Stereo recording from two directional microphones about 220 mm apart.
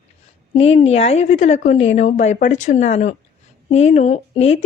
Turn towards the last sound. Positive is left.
turn(degrees=30)  # may be behind; listen again after turning